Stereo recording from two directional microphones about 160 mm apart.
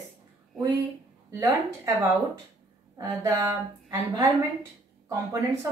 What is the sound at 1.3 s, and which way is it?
A woman's voice, 20° right (ahead or behind).